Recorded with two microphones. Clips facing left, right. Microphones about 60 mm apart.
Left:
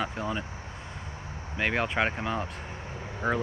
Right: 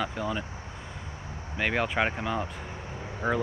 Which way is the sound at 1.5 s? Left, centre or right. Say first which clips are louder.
Even; centre.